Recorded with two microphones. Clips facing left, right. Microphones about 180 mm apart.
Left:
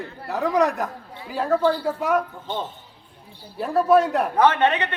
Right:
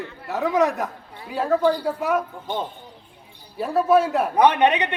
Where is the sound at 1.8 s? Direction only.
Centre (ahead or behind).